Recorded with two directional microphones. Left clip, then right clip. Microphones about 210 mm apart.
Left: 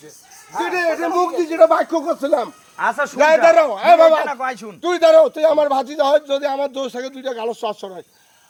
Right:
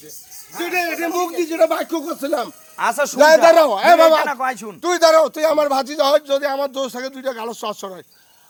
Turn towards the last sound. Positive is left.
turn(degrees=-30)  # may be behind; listen again after turning